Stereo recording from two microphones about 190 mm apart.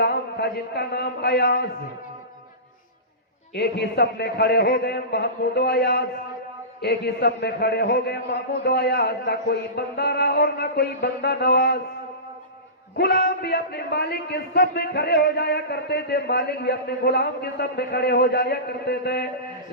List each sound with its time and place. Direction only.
0.0 s a man's voice: 55° left (ahead or behind)
3.5 s a man's voice: 60° left (ahead or behind)
13.0 s a man's voice: 55° left (ahead or behind)